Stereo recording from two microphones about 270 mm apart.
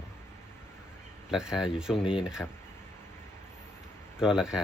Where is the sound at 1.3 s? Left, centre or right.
Centre.